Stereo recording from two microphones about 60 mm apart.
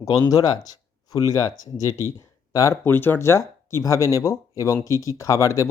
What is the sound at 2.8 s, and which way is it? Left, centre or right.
Speech, left.